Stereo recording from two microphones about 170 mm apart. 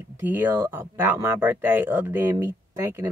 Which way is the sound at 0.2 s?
10° right (ahead or behind).